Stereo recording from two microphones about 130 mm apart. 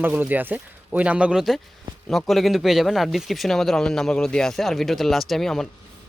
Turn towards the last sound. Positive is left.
turn(degrees=5)  # may be behind; listen again after turning